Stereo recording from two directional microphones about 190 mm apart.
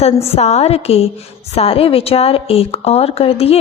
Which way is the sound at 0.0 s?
35° left (ahead or behind).